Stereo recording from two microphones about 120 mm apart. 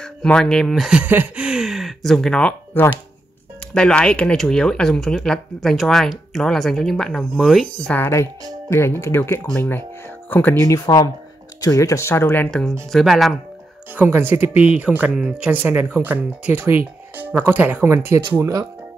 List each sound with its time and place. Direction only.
0.0 s speech: 5° left (ahead or behind)
7.8 s speech: 15° left (ahead or behind)
10.7 s speech: 30° left (ahead or behind)
12.4 s speech: 5° left (ahead or behind)
13.9 s speech: 15° right (ahead or behind)